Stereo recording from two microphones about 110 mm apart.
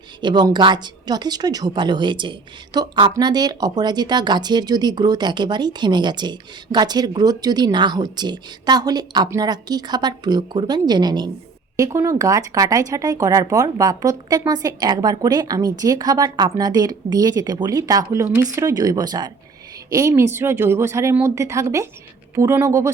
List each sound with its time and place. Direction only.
0.2 s a woman's voice: 45° right (ahead or behind)
11.8 s speech: 30° right (ahead or behind)
19.9 s a woman's voice: 25° right (ahead or behind)